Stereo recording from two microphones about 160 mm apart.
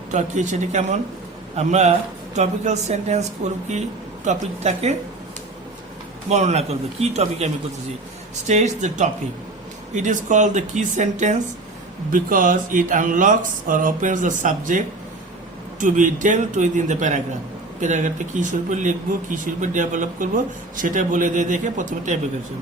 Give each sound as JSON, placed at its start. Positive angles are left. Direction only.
{"t": 0.1, "sound": "a man's voice", "side_deg": -50}
{"t": 4.3, "sound": "a man's voice", "side_deg": -45}
{"t": 6.2, "sound": "a man's voice", "side_deg": -45}
{"t": 15.8, "sound": "a man's voice", "side_deg": -55}